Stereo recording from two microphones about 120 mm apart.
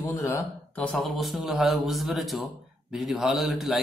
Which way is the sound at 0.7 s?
Centre (ahead or behind).